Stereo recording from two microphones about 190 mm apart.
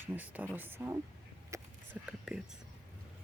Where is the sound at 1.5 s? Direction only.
15° right (ahead or behind).